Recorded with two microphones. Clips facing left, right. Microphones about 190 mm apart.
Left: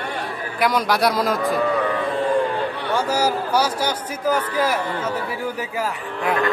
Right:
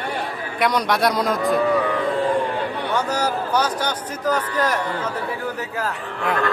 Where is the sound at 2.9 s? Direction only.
10° left (ahead or behind).